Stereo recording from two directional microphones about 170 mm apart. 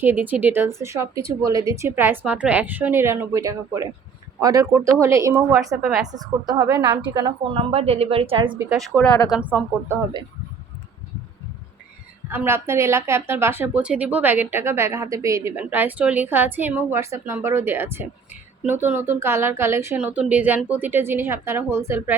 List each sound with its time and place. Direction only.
0.0 s a woman's voice: 10° right (ahead or behind)
5.8 s a woman's voice: centre (ahead or behind)
6.1 s a woman's voice: 25° right (ahead or behind)
6.7 s a woman's voice: 10° right (ahead or behind)
7.1 s a woman's voice: 25° right (ahead or behind)
8.9 s a woman's voice: 10° right (ahead or behind)
12.3 s a woman's voice: 10° right (ahead or behind)